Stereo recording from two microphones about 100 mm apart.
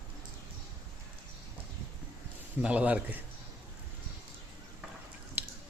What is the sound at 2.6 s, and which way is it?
Speech, 15° right (ahead or behind).